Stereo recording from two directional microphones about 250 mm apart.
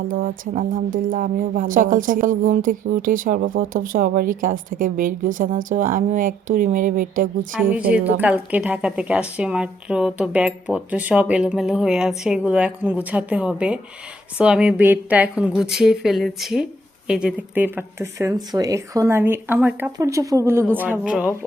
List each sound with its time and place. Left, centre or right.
0.1 s speech: right
7.6 s a woman's voice: centre